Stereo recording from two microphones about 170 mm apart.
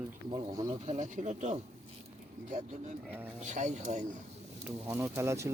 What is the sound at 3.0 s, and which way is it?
Speech, 10° right (ahead or behind).